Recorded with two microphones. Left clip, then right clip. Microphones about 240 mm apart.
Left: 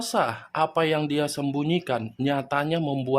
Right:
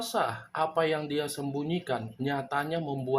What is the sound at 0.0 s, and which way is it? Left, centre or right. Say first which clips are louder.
Speech: left 5 dB; left.